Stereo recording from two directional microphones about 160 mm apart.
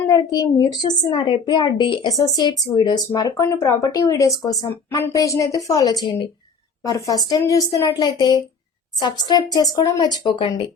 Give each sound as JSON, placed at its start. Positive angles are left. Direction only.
{"t": 0.1, "sound": "a woman's voice", "side_deg": 25}